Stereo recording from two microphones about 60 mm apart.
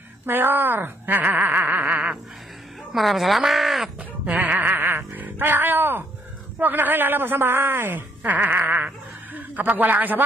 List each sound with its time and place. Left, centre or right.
0.3 s speech: right
2.9 s speech: centre
4.3 s a sound: right
4.6 s a sound: right
6.6 s speech: right
8.2 s speech: right